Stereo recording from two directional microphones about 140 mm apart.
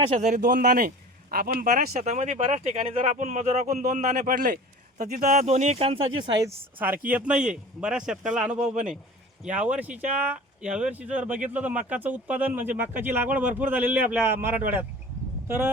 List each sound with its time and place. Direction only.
0.1 s a man's voice: 60° right (ahead or behind); by 6.5 s 30° right (ahead or behind)
6.7 s a man's voice: 15° right (ahead or behind)